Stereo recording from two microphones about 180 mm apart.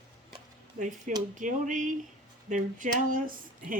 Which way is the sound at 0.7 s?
45° right (ahead or behind).